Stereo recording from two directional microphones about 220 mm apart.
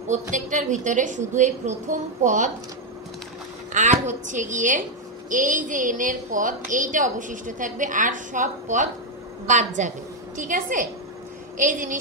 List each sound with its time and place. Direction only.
0.1 s a woman's voice: 35° right (ahead or behind)
3.7 s a woman's voice: 35° right (ahead or behind)